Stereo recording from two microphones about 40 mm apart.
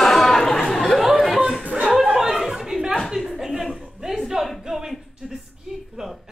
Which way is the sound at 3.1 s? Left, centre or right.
Centre.